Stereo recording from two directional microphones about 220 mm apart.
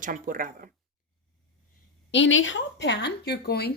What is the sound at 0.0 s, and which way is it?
Speech, 40° right (ahead or behind).